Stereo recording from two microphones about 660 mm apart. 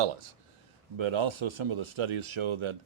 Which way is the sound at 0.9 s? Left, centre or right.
Right.